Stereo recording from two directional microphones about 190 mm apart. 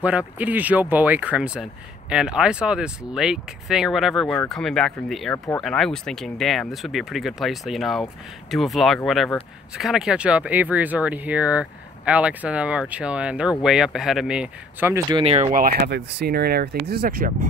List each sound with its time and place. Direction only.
0.0 s speech: 5° right (ahead or behind)
15.0 s speech: 25° right (ahead or behind)
15.5 s speech: 50° right (ahead or behind)